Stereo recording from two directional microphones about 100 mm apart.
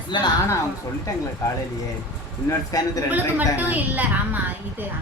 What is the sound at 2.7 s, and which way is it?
Speech, 35° left (ahead or behind).